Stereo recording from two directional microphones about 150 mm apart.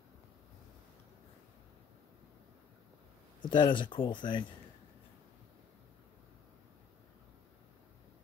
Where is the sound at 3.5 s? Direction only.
35° left (ahead or behind).